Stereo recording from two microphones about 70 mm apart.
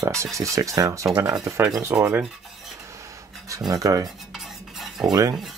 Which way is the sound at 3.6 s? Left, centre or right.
Right.